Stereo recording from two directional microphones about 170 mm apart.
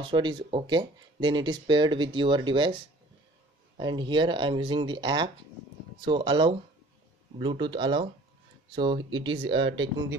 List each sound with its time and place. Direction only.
0.0 s speech: 25° right (ahead or behind)